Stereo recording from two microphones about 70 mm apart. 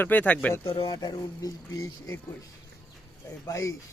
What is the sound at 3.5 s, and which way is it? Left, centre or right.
Speech, left.